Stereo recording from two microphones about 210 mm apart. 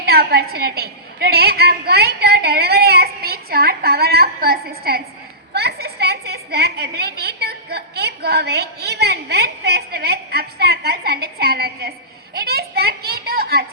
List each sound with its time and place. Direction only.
0.0 s a woman's voice: 50° right (ahead or behind)